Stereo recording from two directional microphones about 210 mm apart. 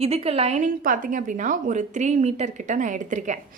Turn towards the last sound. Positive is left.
turn(degrees=-35)  # may be behind; listen again after turning